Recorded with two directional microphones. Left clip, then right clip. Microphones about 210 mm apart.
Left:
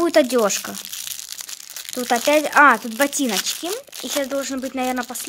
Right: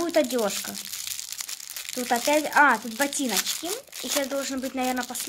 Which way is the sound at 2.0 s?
30° left (ahead or behind).